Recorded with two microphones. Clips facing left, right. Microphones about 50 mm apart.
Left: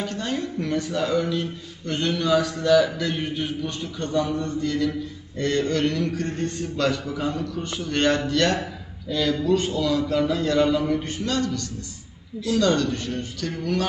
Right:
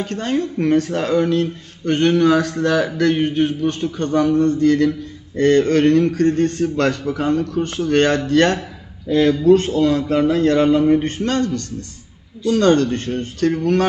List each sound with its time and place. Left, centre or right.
0.1 s speech: right
0.9 s speech: right